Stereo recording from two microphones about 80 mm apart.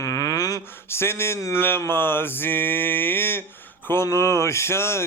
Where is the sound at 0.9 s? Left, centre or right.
Left.